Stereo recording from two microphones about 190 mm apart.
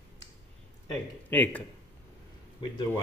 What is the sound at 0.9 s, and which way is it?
Speech, 10° left (ahead or behind).